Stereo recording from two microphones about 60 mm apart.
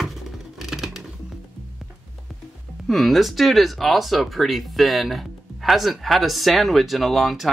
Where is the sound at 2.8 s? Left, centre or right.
Centre.